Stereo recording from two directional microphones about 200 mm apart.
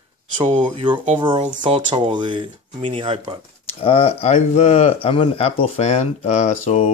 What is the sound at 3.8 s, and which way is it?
Speech, 30° left (ahead or behind).